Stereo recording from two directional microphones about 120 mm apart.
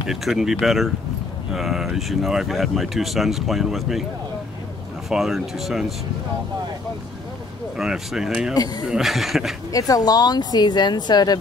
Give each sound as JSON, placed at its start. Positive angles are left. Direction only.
{"t": 0.1, "sound": "speech", "side_deg": -5}
{"t": 5.1, "sound": "speech", "side_deg": -5}
{"t": 7.7, "sound": "speech", "side_deg": -5}
{"t": 9.7, "sound": "speech", "side_deg": 30}